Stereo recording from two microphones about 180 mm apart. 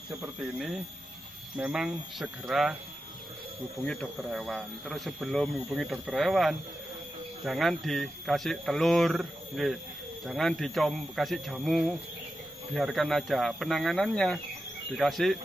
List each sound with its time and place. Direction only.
0.4 s speech: 5° right (ahead or behind)
3.8 s speech: 5° left (ahead or behind)